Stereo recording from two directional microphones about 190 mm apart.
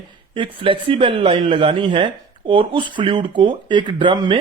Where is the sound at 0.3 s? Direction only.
25° right (ahead or behind).